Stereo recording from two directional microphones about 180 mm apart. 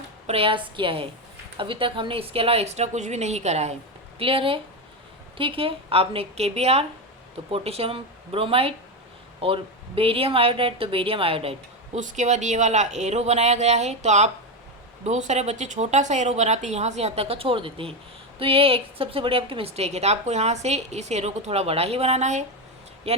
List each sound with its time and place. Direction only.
0.3 s a woman's voice: 30° right (ahead or behind)
11.9 s a woman's voice: 40° right (ahead or behind)